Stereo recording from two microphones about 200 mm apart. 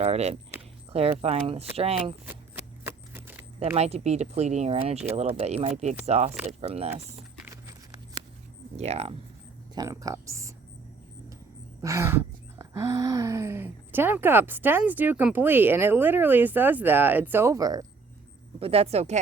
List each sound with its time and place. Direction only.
0.0 s speech: 30° right (ahead or behind)
2.8 s a sound: 10° right (ahead or behind)
3.8 s speech: 30° right (ahead or behind)
6.3 s speech: 5° right (ahead or behind)
6.6 s speech: 30° right (ahead or behind)
7.4 s a sound: 15° right (ahead or behind)
8.7 s speech: 30° right (ahead or behind)
9.7 s a sound: 15° right (ahead or behind)
11.8 s gasp: 15° right (ahead or behind)
18.6 s speech: 30° right (ahead or behind)